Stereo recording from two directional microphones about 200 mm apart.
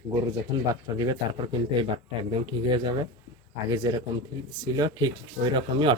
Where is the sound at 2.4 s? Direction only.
20° right (ahead or behind).